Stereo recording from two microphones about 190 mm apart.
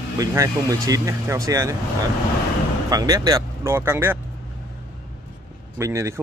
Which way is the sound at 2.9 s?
20° right (ahead or behind).